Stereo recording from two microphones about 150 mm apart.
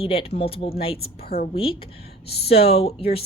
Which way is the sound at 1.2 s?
85° left.